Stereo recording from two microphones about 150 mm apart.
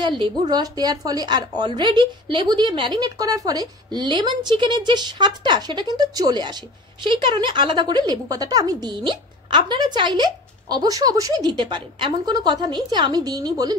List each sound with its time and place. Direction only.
0.0 s a woman's voice: 30° right (ahead or behind)